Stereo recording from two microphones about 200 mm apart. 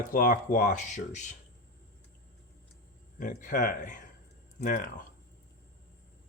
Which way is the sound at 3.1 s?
40° left (ahead or behind).